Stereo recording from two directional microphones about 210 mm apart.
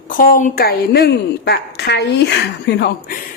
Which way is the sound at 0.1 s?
40° left (ahead or behind).